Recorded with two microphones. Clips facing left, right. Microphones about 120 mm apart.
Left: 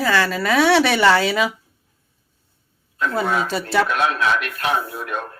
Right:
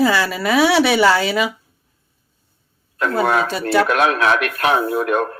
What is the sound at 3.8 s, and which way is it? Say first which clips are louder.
Speech: right 4 dB; 65° right (ahead or behind).